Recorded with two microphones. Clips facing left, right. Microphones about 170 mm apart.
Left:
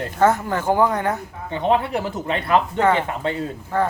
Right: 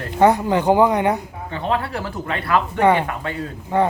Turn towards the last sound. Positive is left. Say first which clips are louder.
# right 3 dB
turn(degrees=-20)  # may be behind; listen again after turning